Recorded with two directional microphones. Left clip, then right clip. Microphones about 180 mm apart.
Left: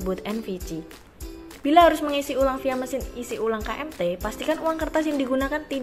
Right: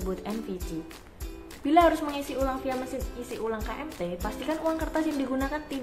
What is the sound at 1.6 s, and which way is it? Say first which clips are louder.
A woman's voice: left 5 dB; 35° left (ahead or behind).